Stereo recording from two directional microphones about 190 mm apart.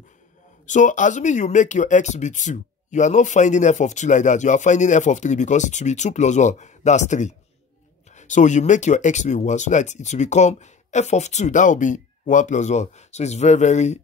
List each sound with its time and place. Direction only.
0.7 s speech: 40° left (ahead or behind)